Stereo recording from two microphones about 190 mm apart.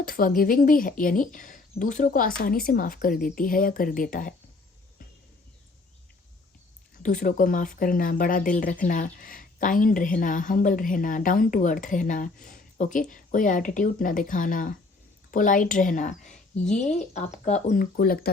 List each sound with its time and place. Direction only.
0.0 s speech: 50° left (ahead or behind)
7.0 s speech: 45° left (ahead or behind)
17.9 s speech: 50° left (ahead or behind)